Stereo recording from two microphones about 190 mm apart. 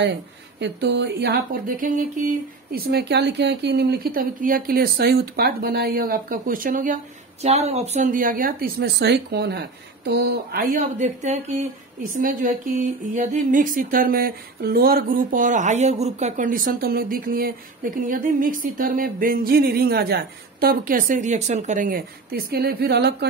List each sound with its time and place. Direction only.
0.6 s speech: 65° right (ahead or behind); by 2.2 s 45° right (ahead or behind)
2.7 s speech: 60° right (ahead or behind)
7.4 s speech: 35° right (ahead or behind); by 23.1 s 60° right (ahead or behind)